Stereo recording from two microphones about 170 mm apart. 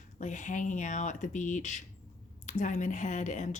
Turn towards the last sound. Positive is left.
turn(degrees=45)  # may be behind; listen again after turning